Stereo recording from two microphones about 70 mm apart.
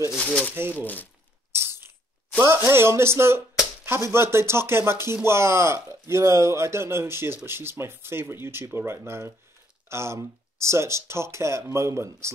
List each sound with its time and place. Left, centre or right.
0.2 s speech: centre
0.6 s speech: right
1.5 s a sound: right
2.5 s speech: right